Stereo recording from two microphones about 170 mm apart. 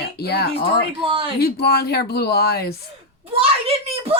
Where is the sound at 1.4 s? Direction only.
70° left (ahead or behind).